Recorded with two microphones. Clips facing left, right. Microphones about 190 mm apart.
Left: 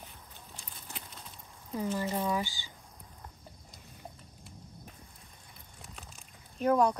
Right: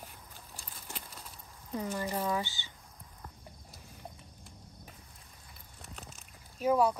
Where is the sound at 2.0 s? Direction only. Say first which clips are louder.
Left 1 dB; 15° left (ahead or behind).